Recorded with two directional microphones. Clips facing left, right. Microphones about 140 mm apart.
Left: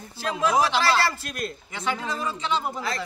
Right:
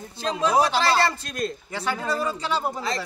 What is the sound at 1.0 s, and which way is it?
Speech, 25° right (ahead or behind).